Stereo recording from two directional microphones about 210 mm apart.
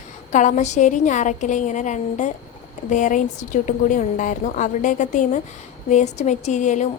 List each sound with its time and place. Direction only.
0.3 s a woman's voice: 35° left (ahead or behind)